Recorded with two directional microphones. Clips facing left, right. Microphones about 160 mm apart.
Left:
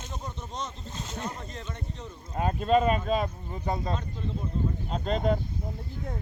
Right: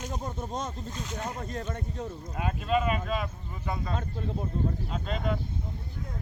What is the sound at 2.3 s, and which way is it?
Speech, 35° left (ahead or behind).